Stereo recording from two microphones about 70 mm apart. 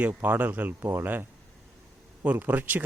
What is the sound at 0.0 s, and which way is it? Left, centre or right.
A man's voice, right.